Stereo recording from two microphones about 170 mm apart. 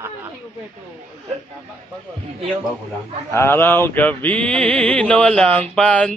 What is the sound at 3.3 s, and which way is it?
Music, 15° left (ahead or behind).